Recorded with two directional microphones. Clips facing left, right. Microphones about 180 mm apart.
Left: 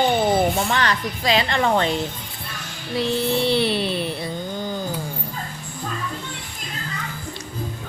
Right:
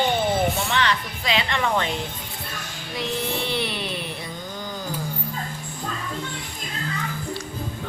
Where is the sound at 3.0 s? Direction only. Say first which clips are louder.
Left 6 dB; 30° left (ahead or behind).